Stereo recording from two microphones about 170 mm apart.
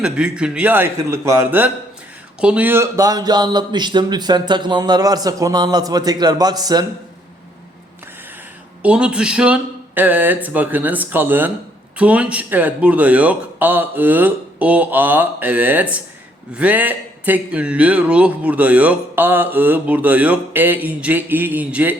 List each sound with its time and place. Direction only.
0.0 s a man's voice: 5° right (ahead or behind); by 6.8 s 25° right (ahead or behind)
8.8 s a man's voice: 5° right (ahead or behind)